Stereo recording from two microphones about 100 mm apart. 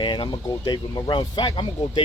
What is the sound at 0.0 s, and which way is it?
Speech, 50° left (ahead or behind).